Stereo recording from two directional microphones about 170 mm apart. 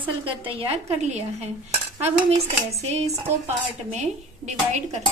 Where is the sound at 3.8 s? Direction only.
45° right (ahead or behind).